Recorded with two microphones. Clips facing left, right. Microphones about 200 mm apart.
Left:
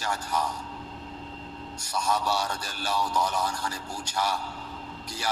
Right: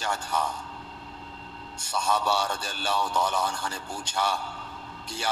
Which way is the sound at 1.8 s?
30° right (ahead or behind).